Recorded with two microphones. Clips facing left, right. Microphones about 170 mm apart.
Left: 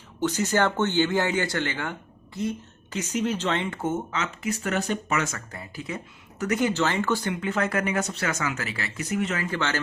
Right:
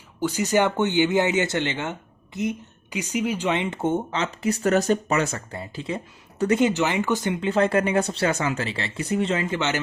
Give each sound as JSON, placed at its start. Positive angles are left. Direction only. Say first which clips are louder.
{"t": 0.2, "sound": "speech", "louder": "right 2 dB", "side_deg": -10}